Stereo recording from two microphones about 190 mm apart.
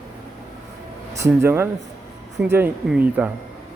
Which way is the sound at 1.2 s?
15° right (ahead or behind).